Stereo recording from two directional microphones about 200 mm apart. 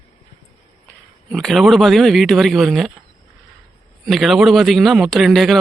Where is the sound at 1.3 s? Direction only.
Centre (ahead or behind).